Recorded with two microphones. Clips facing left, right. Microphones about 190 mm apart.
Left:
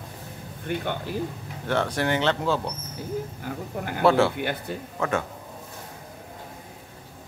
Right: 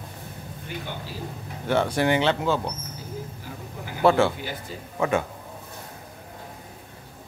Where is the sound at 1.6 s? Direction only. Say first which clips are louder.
Right 3 dB; 10° right (ahead or behind).